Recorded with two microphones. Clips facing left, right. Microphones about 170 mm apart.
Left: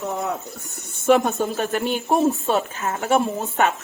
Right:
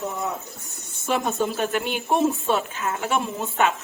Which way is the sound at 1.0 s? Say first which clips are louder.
Left 6 dB; 55° left (ahead or behind).